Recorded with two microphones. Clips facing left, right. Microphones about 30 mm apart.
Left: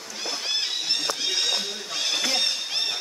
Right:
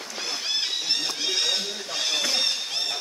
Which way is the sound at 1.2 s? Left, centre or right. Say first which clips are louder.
Even; centre.